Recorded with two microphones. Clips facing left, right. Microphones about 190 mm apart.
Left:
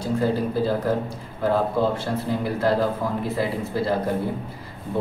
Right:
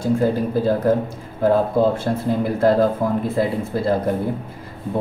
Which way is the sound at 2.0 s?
50° right (ahead or behind).